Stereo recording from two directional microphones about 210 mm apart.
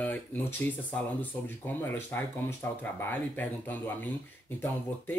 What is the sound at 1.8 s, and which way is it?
Speech, 10° left (ahead or behind).